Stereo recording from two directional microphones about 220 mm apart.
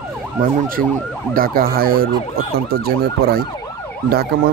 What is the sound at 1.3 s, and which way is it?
Speech, 40° right (ahead or behind).